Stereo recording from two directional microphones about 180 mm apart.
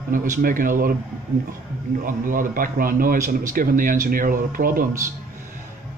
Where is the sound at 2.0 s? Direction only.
50° right (ahead or behind).